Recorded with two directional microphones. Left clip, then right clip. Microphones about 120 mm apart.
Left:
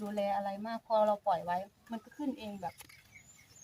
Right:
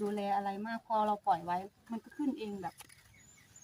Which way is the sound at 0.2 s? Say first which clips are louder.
Left 5 dB; 15° left (ahead or behind).